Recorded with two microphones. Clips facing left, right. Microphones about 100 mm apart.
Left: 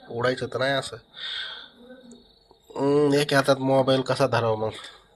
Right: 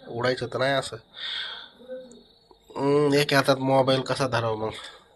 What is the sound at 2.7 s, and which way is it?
Speech, 35° left (ahead or behind).